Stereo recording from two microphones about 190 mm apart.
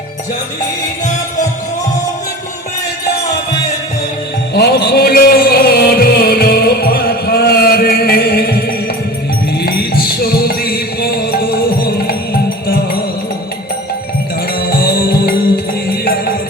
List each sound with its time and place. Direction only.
4.5 s music: 55° left (ahead or behind)
14.6 s music: 50° left (ahead or behind)